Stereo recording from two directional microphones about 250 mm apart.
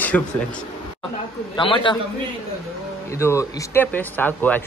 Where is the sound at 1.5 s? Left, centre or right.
Centre.